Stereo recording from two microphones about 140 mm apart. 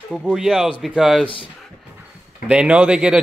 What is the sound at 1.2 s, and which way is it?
Speech, 40° left (ahead or behind).